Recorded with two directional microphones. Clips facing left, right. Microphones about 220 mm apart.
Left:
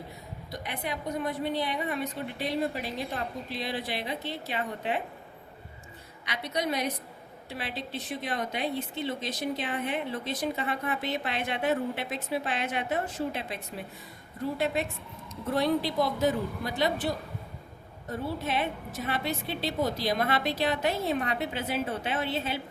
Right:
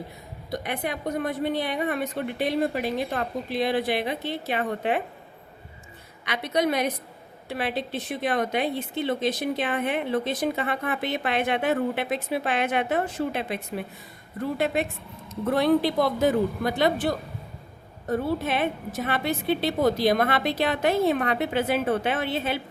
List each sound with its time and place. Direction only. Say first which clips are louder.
0.6 s a woman's voice: right 4 dB; 60° right (ahead or behind)
6.2 s a woman's voice: right 7 dB; 60° right (ahead or behind)
15.4 s a woman's voice: right 6 dB; 65° right (ahead or behind)